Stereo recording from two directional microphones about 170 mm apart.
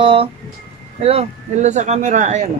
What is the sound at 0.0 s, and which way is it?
Speech, 30° right (ahead or behind).